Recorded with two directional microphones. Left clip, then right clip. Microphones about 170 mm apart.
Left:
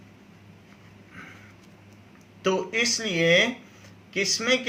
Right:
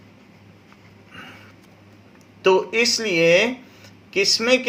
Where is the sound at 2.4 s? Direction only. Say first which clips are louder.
Right 7 dB; 40° right (ahead or behind).